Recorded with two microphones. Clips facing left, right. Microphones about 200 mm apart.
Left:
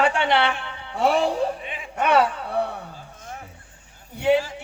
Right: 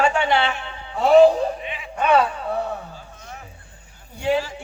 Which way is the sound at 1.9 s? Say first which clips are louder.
Right 1 dB; 80° left.